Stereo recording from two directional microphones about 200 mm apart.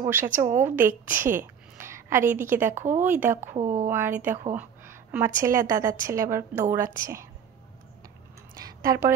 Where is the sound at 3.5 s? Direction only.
35° right (ahead or behind).